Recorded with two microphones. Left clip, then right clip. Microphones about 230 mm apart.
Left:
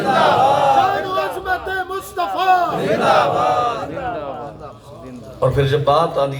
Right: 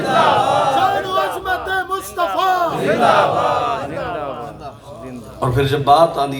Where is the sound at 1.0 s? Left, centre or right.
Right.